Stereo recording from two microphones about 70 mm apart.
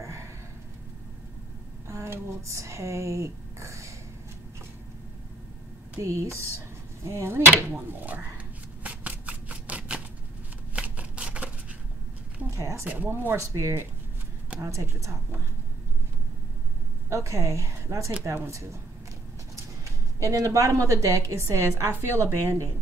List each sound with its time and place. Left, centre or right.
0.0 s gasp: right
1.9 s speech: right
5.9 s a woman's voice: right
7.7 s speech: right
8.8 s shuffling cards: right
12.4 s a sound: right
12.8 s speech: right
13.1 s a woman's voice: right
17.1 s a woman's voice: right
19.8 s a woman's voice: right